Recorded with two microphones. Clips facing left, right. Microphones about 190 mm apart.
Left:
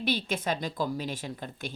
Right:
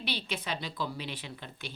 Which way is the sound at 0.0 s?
45° left (ahead or behind).